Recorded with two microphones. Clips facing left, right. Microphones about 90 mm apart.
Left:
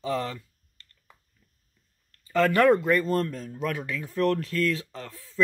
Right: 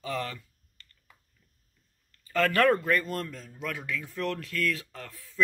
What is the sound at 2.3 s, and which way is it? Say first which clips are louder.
Speech: left 4 dB; 20° left (ahead or behind).